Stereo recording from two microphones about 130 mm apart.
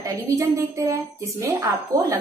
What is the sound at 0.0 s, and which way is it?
Speech, 25° right (ahead or behind).